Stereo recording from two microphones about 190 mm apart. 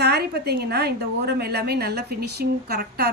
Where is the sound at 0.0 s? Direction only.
60° right (ahead or behind).